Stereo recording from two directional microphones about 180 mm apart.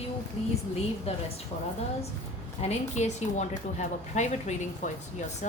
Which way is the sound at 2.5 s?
40° left (ahead or behind).